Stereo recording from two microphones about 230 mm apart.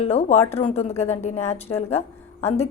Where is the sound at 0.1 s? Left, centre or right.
Left.